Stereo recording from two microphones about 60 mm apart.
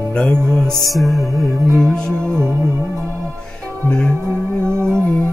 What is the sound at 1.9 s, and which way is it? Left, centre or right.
Music, centre.